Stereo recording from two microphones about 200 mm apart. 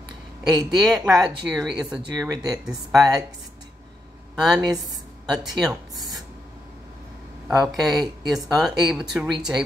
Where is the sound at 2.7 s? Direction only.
15° right (ahead or behind).